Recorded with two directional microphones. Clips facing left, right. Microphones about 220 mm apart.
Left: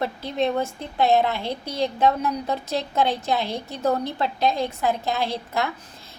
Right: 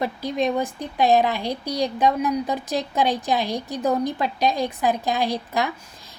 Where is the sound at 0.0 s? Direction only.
15° right (ahead or behind).